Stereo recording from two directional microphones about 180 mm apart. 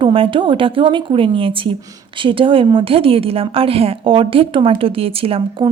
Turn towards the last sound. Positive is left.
turn(degrees=-30)  # may be behind; listen again after turning